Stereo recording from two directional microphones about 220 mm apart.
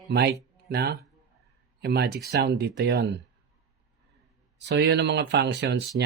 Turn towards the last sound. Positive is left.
turn(degrees=-50)  # may be behind; listen again after turning